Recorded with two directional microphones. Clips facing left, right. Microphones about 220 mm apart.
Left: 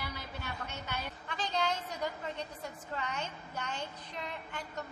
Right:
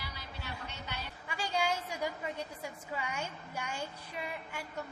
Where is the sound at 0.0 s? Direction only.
50° left (ahead or behind).